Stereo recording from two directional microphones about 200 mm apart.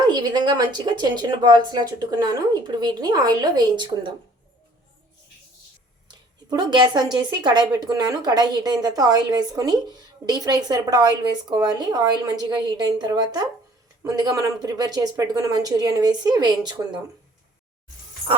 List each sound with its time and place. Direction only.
0.1 s a woman's voice: 20° right (ahead or behind)
6.1 s a woman's voice: 20° right (ahead or behind)